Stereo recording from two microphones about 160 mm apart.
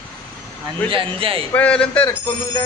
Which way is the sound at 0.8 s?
35° right (ahead or behind).